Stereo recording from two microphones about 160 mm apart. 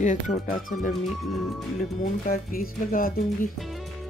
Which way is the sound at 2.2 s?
65° left (ahead or behind).